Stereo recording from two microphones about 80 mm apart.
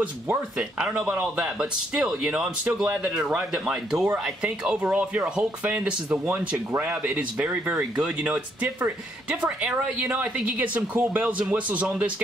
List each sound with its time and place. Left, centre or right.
0.6 s speech: centre
4.1 s speech: centre